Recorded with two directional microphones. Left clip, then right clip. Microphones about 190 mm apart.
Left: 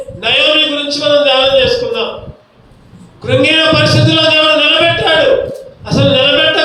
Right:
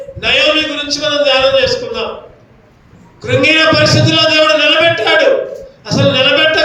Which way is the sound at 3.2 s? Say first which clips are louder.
Even; 45° right (ahead or behind).